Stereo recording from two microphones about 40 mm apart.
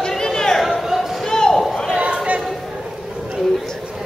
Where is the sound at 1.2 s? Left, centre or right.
Centre.